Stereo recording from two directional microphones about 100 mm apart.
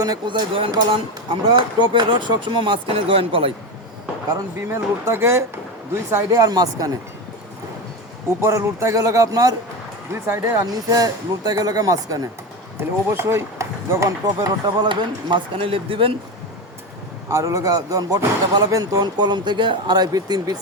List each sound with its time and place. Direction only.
0.3 s speech: 55° right (ahead or behind)
4.7 s speech: 25° right (ahead or behind)
8.4 s speech: 30° right (ahead or behind)
10.1 s speech: 25° right (ahead or behind)
13.1 s speech: 25° right (ahead or behind)
14.8 s speech: 50° right (ahead or behind)
15.5 s speech: 65° right (ahead or behind)
17.2 s speech: 30° right (ahead or behind)
18.9 s speech: 50° right (ahead or behind)